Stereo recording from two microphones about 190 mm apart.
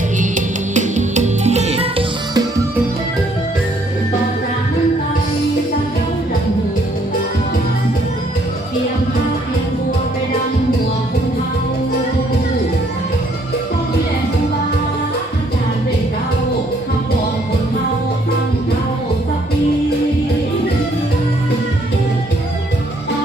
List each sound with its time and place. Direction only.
0.2 s music: 40° right (ahead or behind)